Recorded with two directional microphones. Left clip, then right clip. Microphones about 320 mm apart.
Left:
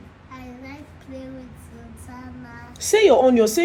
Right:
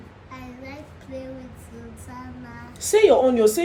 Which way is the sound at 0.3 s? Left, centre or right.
Centre.